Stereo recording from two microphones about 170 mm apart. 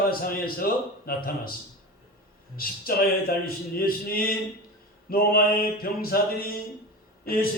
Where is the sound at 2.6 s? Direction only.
60° left (ahead or behind).